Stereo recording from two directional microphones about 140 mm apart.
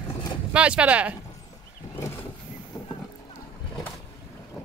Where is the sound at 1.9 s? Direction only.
20° left (ahead or behind).